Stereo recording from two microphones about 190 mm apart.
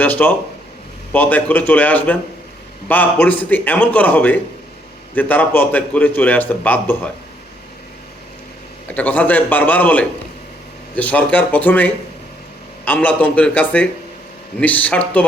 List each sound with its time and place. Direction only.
0.0 s a man's voice: 10° left (ahead or behind)
9.0 s a man's voice: 10° left (ahead or behind)